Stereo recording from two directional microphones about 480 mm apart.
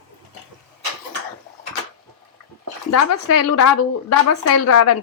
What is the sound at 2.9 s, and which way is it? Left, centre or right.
A woman's voice, left.